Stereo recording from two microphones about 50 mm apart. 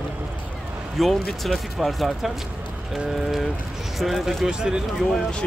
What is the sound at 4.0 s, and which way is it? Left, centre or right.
Speech, centre.